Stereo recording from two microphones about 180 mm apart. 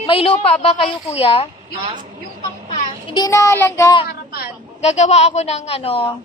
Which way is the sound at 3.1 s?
20° left (ahead or behind).